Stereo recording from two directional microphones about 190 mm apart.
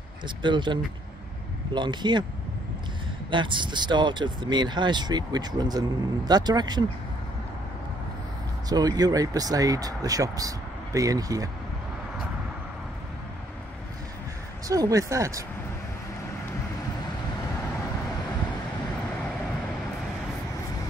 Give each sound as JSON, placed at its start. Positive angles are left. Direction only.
{"t": 0.4, "sound": "speech", "side_deg": -25}
{"t": 3.3, "sound": "speech", "side_deg": -25}
{"t": 8.6, "sound": "speech", "side_deg": -20}
{"t": 14.7, "sound": "speech", "side_deg": -15}